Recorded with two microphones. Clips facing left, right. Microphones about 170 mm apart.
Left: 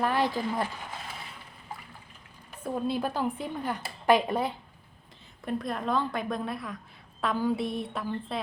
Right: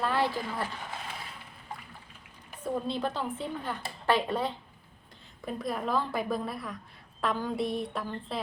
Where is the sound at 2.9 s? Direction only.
10° left (ahead or behind).